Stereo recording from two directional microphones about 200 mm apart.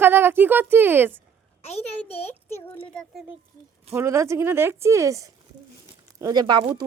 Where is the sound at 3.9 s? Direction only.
15° right (ahead or behind).